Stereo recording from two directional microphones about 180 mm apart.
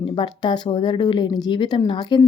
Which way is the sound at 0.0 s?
25° left (ahead or behind).